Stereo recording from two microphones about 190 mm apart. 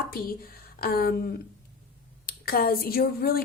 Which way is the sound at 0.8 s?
50° left (ahead or behind).